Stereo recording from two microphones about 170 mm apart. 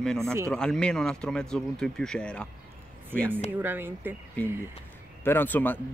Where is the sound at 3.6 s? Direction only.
10° right (ahead or behind).